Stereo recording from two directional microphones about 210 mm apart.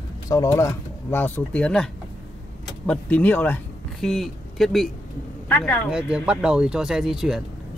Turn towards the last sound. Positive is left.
turn(degrees=0)  # may be behind; listen again after turning